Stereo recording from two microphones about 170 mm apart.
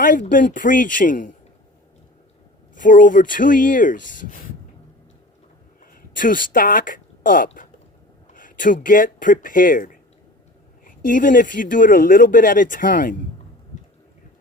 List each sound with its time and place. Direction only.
0.0 s speech: 50° left (ahead or behind)
2.7 s speech: 50° left (ahead or behind)
5.8 s a sound: 55° left (ahead or behind)
8.3 s a man's voice: 50° left (ahead or behind)